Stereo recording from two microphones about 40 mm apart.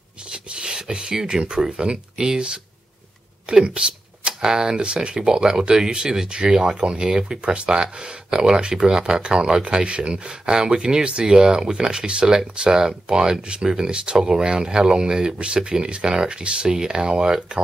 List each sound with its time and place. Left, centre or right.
0.3 s beatboxing: right
1.2 s speech: right